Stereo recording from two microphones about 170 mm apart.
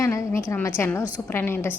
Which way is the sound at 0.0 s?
15° left (ahead or behind).